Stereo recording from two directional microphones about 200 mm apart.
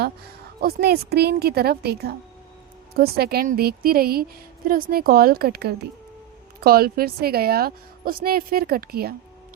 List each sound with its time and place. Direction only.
0.6 s a woman's voice: 50° right (ahead or behind)